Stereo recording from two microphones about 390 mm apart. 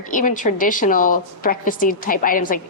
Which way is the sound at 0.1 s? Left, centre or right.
Centre.